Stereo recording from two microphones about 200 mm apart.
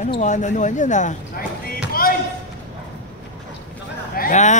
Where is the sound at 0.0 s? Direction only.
35° left (ahead or behind).